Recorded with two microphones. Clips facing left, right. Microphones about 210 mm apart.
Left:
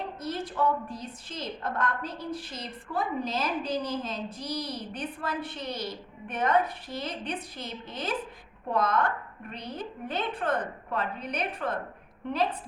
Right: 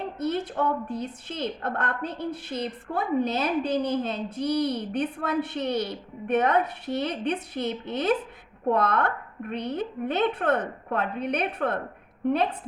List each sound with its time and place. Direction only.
0.2 s a woman's voice: 60° right (ahead or behind)